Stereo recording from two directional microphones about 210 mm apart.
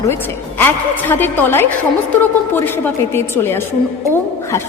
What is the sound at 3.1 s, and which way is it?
Speech, 10° left (ahead or behind).